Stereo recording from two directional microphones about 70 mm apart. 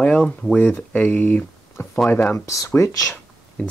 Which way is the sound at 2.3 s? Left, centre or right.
Left.